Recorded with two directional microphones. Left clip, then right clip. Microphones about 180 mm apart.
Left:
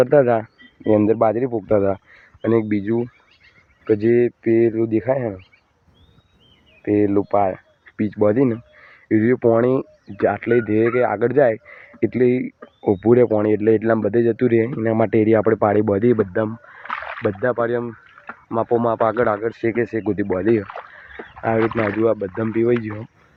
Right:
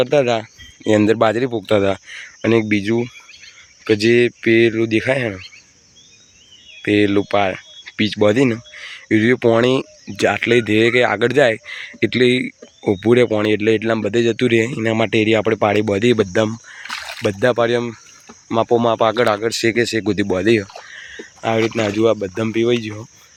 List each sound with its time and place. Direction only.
0.0 s speech: 5° left (ahead or behind)
0.9 s speech: 10° right (ahead or behind)
3.8 s speech: 30° right (ahead or behind); by 5.4 s 10° right (ahead or behind)
6.8 s speech: 10° right (ahead or behind)
16.3 s chicken: 20° right (ahead or behind)
16.9 s a sound: 5° right (ahead or behind)
17.4 s speech: 25° right (ahead or behind); by 19.4 s 10° right (ahead or behind)
19.6 s speech: 25° right (ahead or behind)
20.1 s speech: 15° right (ahead or behind)
21.9 s speech: 20° right (ahead or behind)
22.6 s speech: 5° right (ahead or behind)